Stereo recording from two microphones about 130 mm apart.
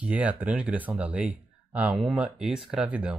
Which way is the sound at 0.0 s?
10° right (ahead or behind).